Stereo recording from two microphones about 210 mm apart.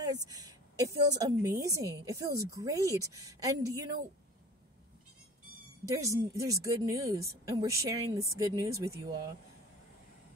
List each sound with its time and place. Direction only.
0.0 s a woman's voice: 15° right (ahead or behind)
5.9 s a woman's voice: 15° right (ahead or behind)